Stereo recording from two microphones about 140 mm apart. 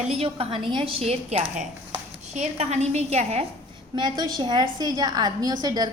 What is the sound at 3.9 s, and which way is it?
A woman's voice, 30° right (ahead or behind).